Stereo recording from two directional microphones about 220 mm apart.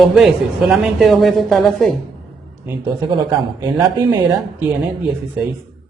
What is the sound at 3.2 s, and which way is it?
Speech, 20° right (ahead or behind).